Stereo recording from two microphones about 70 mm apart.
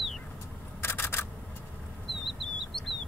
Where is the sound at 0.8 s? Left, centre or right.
Left.